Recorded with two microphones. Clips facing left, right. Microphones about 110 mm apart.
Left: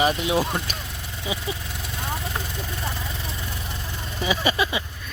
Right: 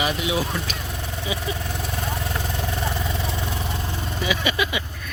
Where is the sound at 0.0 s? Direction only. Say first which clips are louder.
Left 2 dB; 40° left (ahead or behind).